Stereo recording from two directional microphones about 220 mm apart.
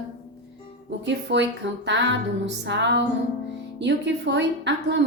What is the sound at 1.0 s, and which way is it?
A woman's voice, 55° right (ahead or behind).